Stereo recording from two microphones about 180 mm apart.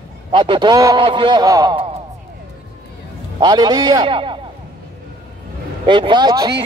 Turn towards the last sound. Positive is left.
turn(degrees=-20)  # may be behind; listen again after turning